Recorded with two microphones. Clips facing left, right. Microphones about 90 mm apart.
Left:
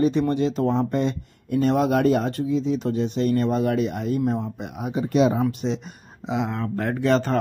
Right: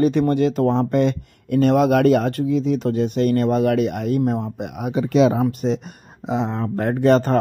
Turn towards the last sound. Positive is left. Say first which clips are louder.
# right 5 dB
turn(degrees=-45)  # may be behind; listen again after turning